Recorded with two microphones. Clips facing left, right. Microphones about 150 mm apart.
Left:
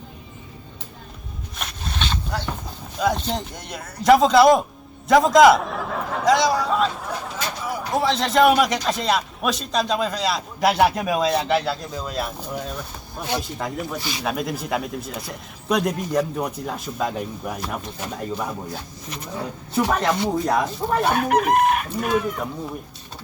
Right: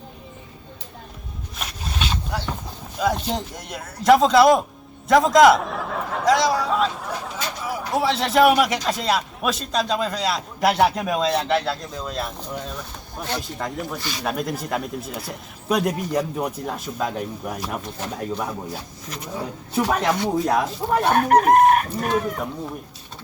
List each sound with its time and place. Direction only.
1.5 s a sound: 5° right (ahead or behind)
3.0 s a man's voice: centre (ahead or behind)
21.1 s chicken: 45° right (ahead or behind)